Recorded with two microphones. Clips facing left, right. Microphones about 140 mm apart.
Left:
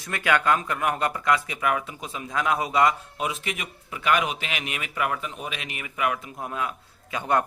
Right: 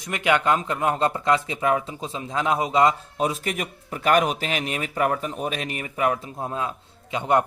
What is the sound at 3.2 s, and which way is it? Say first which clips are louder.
Speech: right 5 dB; 40° right (ahead or behind).